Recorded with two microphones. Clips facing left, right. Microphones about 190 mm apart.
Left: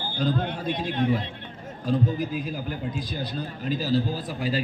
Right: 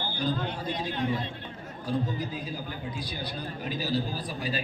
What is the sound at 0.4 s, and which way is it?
Speech, 60° left (ahead or behind).